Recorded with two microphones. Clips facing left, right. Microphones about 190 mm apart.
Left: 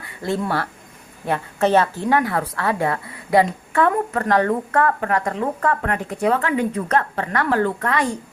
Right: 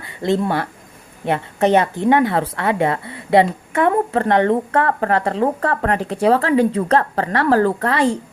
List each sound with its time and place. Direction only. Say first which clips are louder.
0.2 s a woman's voice: right 4 dB; 20° right (ahead or behind)